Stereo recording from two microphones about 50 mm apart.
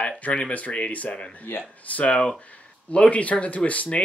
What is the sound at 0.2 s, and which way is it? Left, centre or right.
Speech, left.